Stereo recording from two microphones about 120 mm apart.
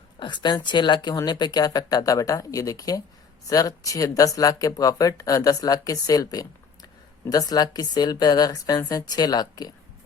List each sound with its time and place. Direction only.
0.2 s speech: 40° left (ahead or behind)